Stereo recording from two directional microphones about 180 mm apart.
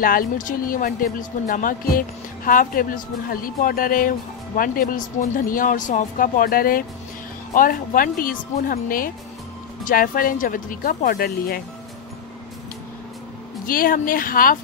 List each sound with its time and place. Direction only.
0.0 s speech: 50° left (ahead or behind)
13.7 s speech: 50° left (ahead or behind)